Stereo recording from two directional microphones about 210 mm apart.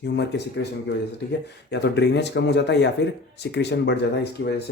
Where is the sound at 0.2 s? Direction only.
55° left (ahead or behind).